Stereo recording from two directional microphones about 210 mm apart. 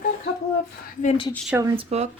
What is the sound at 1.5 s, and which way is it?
Speech, 15° right (ahead or behind).